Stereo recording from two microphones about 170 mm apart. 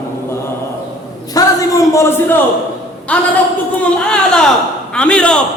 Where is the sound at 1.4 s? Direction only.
20° left (ahead or behind).